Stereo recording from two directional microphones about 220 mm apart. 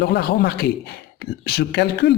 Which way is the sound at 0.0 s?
45° left (ahead or behind).